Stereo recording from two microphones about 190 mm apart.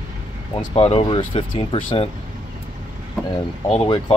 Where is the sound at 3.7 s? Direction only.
30° left (ahead or behind).